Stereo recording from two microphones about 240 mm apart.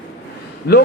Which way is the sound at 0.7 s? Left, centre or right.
Left.